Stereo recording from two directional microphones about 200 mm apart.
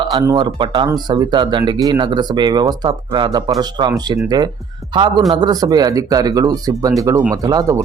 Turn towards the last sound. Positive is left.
turn(degrees=-15)  # may be behind; listen again after turning